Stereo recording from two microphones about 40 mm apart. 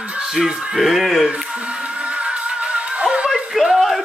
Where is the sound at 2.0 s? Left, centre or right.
Right.